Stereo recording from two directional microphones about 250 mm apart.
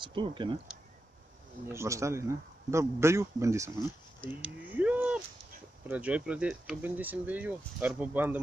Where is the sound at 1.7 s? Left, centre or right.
Centre.